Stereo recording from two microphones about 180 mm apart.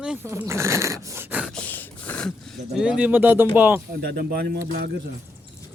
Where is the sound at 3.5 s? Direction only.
10° right (ahead or behind).